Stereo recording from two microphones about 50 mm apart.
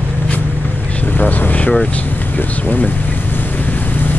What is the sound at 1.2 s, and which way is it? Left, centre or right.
Speech, left.